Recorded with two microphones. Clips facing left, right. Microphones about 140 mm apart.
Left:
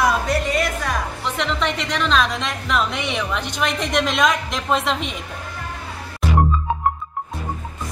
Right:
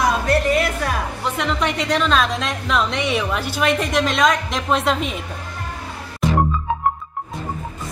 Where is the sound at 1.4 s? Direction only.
10° right (ahead or behind).